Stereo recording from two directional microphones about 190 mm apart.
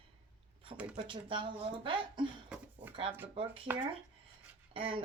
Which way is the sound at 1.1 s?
25° right (ahead or behind).